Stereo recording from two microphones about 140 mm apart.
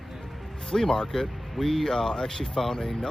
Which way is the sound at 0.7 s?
5° left (ahead or behind).